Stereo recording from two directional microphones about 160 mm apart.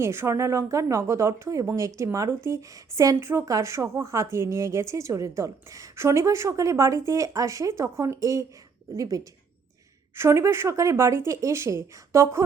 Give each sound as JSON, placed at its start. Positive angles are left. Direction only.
{"t": 0.0, "sound": "a woman's voice", "side_deg": -15}